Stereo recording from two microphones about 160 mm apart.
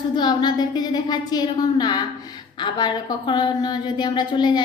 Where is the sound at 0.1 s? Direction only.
25° left (ahead or behind).